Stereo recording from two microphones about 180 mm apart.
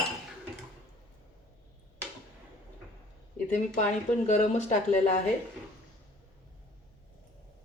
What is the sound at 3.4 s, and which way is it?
Speech, 40° left (ahead or behind).